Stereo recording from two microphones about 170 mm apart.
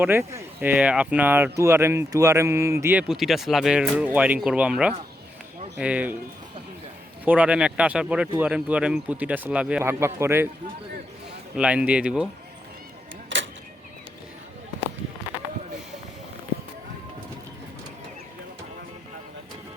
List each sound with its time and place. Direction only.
0.0 s speech: 15° right (ahead or behind)
7.3 s speech: 10° right (ahead or behind)
11.5 s speech: 5° right (ahead or behind)
13.3 s a sound: 90° right